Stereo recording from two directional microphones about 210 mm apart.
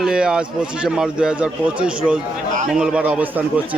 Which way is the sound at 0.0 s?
5° right (ahead or behind).